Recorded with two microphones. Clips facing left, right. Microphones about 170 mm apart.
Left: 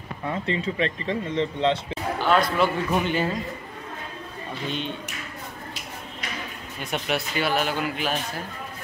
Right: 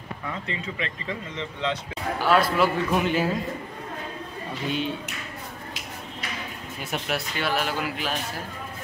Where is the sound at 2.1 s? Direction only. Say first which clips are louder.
Even; 5° right (ahead or behind).